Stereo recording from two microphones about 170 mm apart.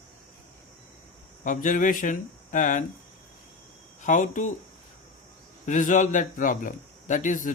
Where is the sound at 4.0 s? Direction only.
45° left (ahead or behind).